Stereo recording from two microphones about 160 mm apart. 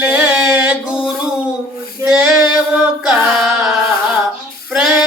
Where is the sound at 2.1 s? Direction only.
5° right (ahead or behind).